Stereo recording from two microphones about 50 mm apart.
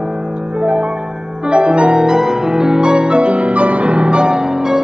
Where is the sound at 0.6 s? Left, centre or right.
Right.